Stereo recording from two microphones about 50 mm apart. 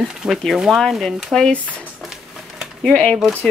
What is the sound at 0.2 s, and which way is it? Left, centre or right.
Speech, centre.